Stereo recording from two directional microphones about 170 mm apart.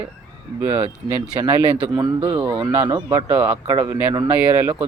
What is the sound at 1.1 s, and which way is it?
Speech, 15° right (ahead or behind).